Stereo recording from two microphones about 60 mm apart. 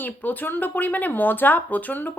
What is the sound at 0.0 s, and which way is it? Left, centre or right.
Speech, left.